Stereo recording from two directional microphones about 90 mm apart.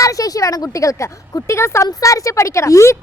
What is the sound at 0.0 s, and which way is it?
A woman's voice, 40° left (ahead or behind).